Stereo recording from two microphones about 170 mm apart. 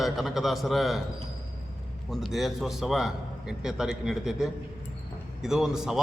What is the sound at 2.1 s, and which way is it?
A man's voice, centre (ahead or behind).